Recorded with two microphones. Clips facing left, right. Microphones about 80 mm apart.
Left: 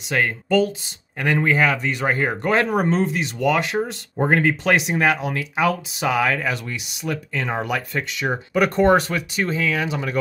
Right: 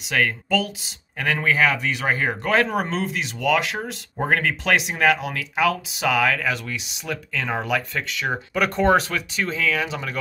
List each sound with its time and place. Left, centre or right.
0.0 s speech: centre
4.3 s speech: centre
5.0 s speech: centre